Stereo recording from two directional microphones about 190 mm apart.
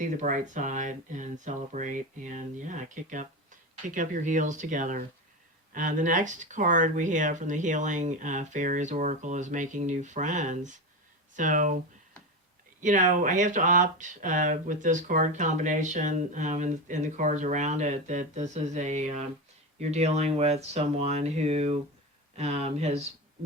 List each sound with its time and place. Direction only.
0.0 s speech: 40° right (ahead or behind)
12.8 s speech: 40° right (ahead or behind)